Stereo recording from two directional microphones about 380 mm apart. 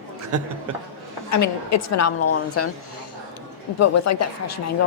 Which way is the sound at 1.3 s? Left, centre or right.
Left.